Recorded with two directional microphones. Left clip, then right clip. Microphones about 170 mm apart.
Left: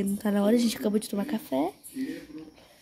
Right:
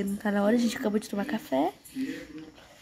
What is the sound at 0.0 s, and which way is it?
Speech, 35° left (ahead or behind).